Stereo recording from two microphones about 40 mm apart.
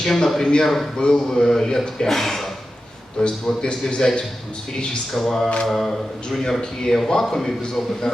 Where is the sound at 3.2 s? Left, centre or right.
Centre.